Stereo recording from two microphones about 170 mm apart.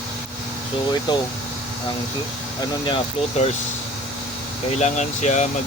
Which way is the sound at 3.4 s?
40° left (ahead or behind).